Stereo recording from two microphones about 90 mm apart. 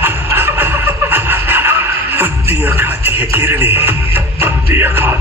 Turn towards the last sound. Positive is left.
turn(degrees=-25)  # may be behind; listen again after turning